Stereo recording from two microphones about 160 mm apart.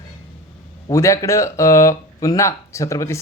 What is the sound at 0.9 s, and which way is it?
Speech, 20° left (ahead or behind).